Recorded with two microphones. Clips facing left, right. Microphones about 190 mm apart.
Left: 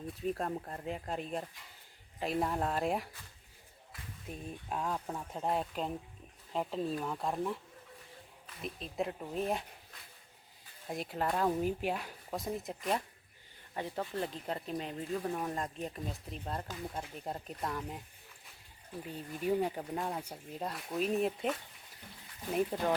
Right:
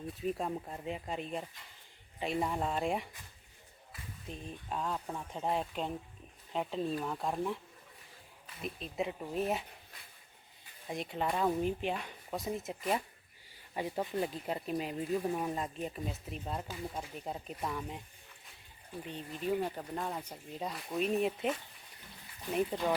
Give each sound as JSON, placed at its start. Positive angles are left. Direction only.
{"t": 0.1, "sound": "speech", "side_deg": 0}
{"t": 4.3, "sound": "speech", "side_deg": 5}
{"t": 8.6, "sound": "speech", "side_deg": 0}
{"t": 10.8, "sound": "speech", "side_deg": 0}
{"t": 13.7, "sound": "speech", "side_deg": -10}
{"t": 19.0, "sound": "speech", "side_deg": 5}